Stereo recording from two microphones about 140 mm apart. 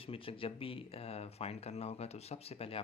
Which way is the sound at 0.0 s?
40° left (ahead or behind).